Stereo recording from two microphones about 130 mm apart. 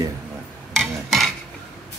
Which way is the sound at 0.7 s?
Centre (ahead or behind).